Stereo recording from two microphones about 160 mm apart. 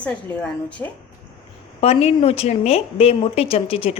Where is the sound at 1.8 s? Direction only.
40° left (ahead or behind).